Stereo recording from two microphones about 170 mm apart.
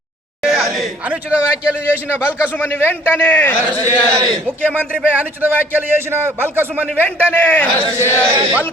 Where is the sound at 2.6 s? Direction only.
10° left (ahead or behind).